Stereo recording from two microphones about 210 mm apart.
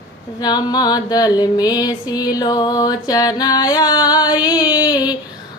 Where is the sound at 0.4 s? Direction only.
20° left (ahead or behind).